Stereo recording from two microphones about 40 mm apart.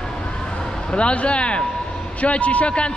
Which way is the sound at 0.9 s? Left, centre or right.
Left.